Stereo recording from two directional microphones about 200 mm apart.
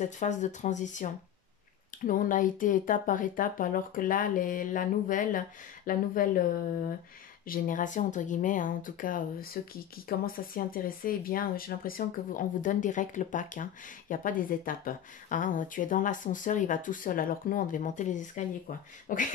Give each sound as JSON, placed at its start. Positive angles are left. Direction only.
{"t": 0.0, "sound": "speech", "side_deg": 35}
{"t": 7.4, "sound": "speech", "side_deg": 45}